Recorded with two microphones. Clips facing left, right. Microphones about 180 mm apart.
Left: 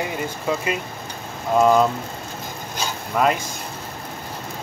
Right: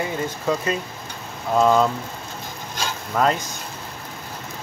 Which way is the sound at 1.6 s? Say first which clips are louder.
Left 1 dB; 15° left (ahead or behind).